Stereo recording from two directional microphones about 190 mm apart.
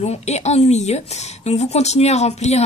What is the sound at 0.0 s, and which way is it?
Speech, 35° left (ahead or behind).